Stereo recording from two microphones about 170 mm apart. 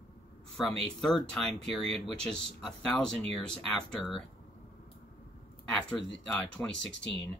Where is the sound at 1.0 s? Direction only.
Centre (ahead or behind).